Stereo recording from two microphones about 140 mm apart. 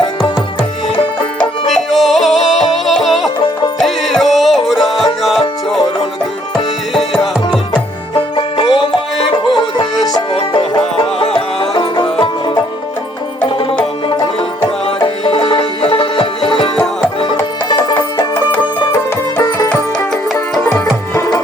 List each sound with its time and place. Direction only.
0.9 s music: 5° left (ahead or behind)
6.9 s music: centre (ahead or behind)
8.1 s music: 40° left (ahead or behind)
10.3 s music: 40° left (ahead or behind)
15.0 s music: 40° left (ahead or behind)
17.7 s music: 35° left (ahead or behind)
18.9 s music: 20° left (ahead or behind)